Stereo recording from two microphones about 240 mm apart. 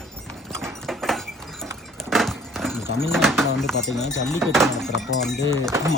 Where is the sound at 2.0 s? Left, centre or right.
Centre.